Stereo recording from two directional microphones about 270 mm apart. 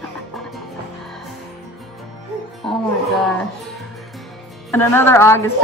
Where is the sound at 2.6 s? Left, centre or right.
Centre.